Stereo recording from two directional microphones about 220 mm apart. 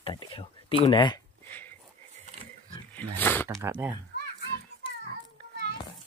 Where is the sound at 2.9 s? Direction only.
10° left (ahead or behind).